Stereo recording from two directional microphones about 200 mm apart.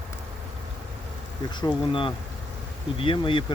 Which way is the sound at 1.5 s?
25° left (ahead or behind).